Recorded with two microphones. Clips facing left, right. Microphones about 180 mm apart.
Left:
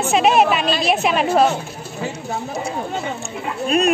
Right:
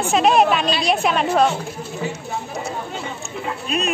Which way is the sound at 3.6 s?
55° left (ahead or behind).